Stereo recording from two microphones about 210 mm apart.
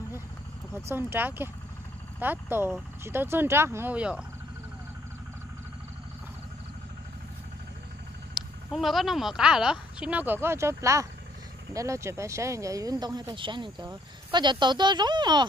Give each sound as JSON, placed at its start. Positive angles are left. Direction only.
{"t": 0.8, "sound": "speech", "side_deg": -10}
{"t": 8.4, "sound": "speech", "side_deg": 0}